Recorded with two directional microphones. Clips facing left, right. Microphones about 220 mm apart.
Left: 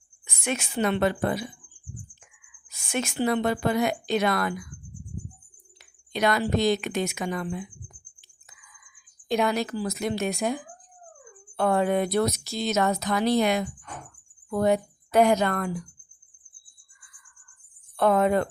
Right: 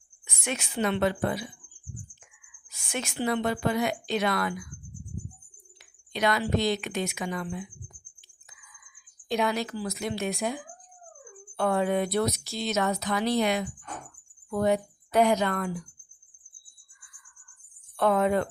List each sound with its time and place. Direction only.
0.4 s speech: 50° left (ahead or behind)
2.9 s speech: 50° left (ahead or behind)
6.1 s speech: 45° left (ahead or behind)
9.3 s speech: 50° left (ahead or behind)
11.5 s speech: 50° left (ahead or behind)
17.9 s speech: 45° left (ahead or behind)